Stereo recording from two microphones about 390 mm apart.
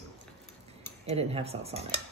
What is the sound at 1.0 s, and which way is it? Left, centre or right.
Cutlery, centre.